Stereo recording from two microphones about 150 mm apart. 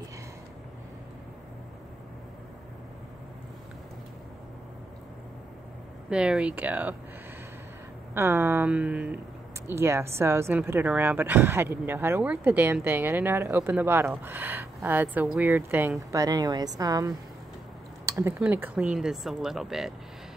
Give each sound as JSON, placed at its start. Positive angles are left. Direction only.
{"t": 6.0, "sound": "a woman's voice", "side_deg": -5}
{"t": 8.1, "sound": "a woman's voice", "side_deg": -15}
{"t": 16.1, "sound": "a woman's voice", "side_deg": -25}
{"t": 18.0, "sound": "a sound", "side_deg": -20}
{"t": 18.4, "sound": "speech", "side_deg": -10}